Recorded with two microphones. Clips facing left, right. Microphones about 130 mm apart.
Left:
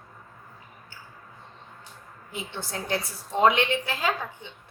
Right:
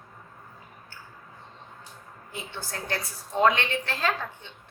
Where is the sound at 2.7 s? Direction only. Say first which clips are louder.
Left 3 dB; 20° left (ahead or behind).